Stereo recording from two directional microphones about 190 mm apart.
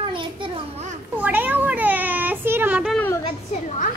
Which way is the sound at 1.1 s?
10° right (ahead or behind).